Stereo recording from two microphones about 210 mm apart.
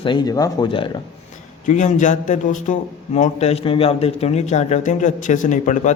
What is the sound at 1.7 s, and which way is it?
A man's voice, 35° left (ahead or behind).